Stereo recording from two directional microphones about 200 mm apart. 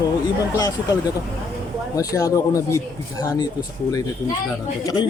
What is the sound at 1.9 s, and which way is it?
Speech, 15° left (ahead or behind).